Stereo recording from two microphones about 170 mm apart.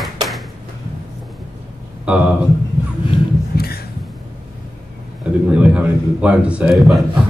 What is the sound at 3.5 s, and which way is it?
Heart sounds, 65° left (ahead or behind).